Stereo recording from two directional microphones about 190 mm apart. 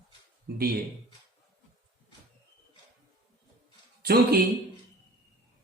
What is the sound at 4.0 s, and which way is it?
Speech, 55° right (ahead or behind).